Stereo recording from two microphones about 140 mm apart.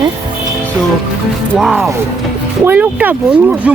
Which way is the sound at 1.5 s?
Centre (ahead or behind).